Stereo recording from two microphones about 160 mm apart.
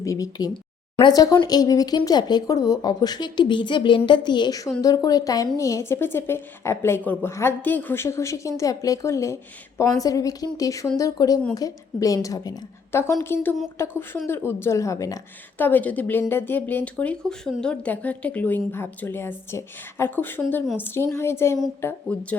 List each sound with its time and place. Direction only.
0.0 s a woman's voice: 20° left (ahead or behind)